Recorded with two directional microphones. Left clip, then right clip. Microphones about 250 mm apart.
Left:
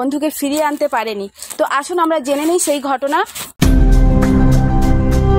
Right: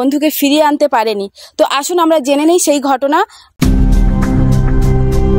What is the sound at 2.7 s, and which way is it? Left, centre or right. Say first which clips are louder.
Speech: right 4 dB; right.